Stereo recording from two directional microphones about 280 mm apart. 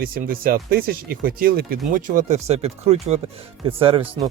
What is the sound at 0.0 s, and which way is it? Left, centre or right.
Speech, right.